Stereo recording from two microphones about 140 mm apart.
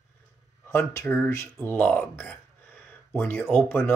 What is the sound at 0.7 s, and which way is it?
Speech, 20° left (ahead or behind).